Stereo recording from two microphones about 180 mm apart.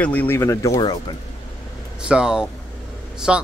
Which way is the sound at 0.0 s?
10° left (ahead or behind).